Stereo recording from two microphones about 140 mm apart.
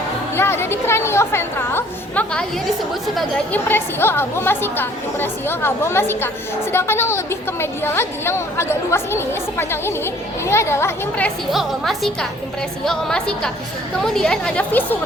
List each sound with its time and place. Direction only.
0.3 s a woman's voice: 15° left (ahead or behind)
3.5 s a woman's voice: 15° left (ahead or behind)
11.5 s a woman's voice: centre (ahead or behind)